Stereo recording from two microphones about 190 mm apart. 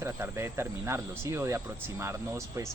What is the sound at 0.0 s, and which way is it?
Speech, 15° right (ahead or behind).